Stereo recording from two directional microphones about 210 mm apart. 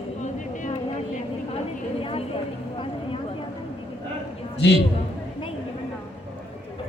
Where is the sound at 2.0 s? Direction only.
25° left (ahead or behind).